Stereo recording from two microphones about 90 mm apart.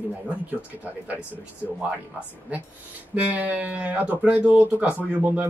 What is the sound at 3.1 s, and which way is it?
Speech, 15° right (ahead or behind).